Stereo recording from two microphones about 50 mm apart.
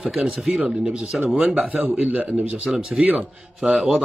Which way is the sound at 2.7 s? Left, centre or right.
Centre.